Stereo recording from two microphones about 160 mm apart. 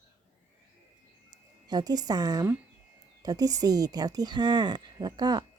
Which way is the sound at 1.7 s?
25° right (ahead or behind).